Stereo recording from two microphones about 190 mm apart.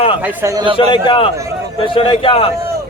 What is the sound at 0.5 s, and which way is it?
Speech, 25° right (ahead or behind).